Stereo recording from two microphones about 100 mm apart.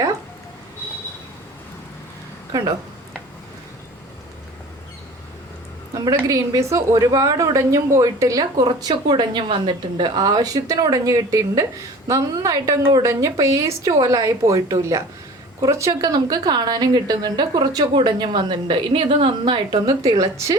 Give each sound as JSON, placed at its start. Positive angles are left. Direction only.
{"t": 6.2, "sound": "a woman's voice", "side_deg": -35}
{"t": 17.9, "sound": "a woman's voice", "side_deg": -55}
{"t": 20.0, "sound": "a woman's voice", "side_deg": -35}